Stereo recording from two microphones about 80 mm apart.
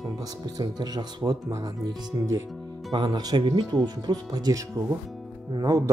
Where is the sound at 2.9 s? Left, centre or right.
Right.